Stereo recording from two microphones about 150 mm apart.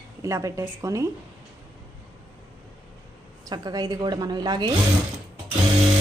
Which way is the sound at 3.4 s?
25° right (ahead or behind).